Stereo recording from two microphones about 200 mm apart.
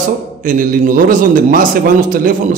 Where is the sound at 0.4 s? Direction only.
45° right (ahead or behind).